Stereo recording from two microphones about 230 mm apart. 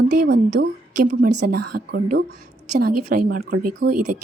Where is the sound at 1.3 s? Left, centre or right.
Right.